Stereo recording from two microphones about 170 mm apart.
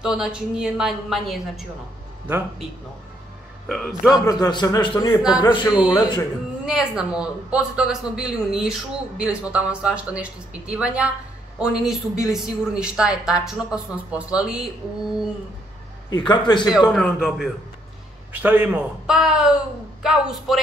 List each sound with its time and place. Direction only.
0.0 s speech: 5° right (ahead or behind)
3.6 s speech: centre (ahead or behind)
4.3 s speech: 25° left (ahead or behind)
6.6 s a woman's voice: 5° right (ahead or behind)
16.1 s speech: 25° left (ahead or behind)
16.9 s speech: centre (ahead or behind)